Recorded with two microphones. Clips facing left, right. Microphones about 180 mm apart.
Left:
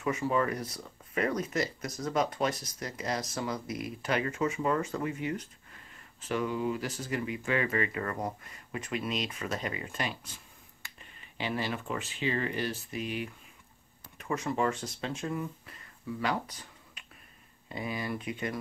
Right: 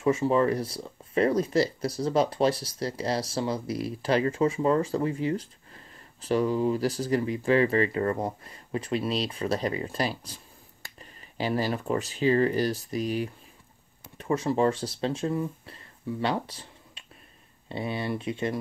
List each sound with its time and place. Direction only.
0.0 s speech: 30° right (ahead or behind)